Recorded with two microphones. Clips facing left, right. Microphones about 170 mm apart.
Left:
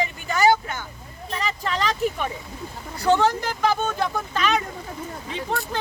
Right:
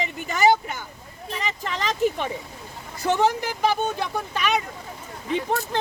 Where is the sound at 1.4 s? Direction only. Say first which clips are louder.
Left 3 dB; 20° right (ahead or behind).